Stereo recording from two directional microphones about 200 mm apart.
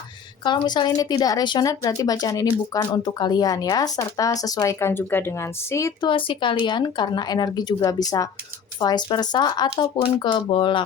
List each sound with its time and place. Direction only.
0.4 s speech: 20° left (ahead or behind)